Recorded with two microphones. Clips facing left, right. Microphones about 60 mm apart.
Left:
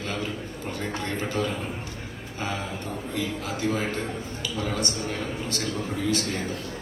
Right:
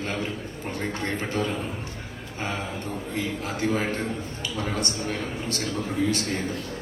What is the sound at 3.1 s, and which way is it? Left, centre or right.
A man's voice, right.